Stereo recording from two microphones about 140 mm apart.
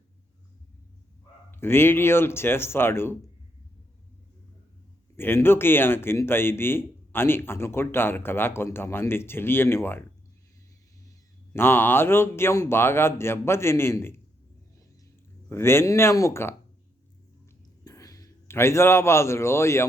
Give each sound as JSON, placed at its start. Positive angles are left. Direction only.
{"t": 1.5, "sound": "a man's voice", "side_deg": 15}
{"t": 5.1, "sound": "a man's voice", "side_deg": 15}
{"t": 11.5, "sound": "a man's voice", "side_deg": 15}
{"t": 15.4, "sound": "a man's voice", "side_deg": 15}
{"t": 17.8, "sound": "a man's voice", "side_deg": 25}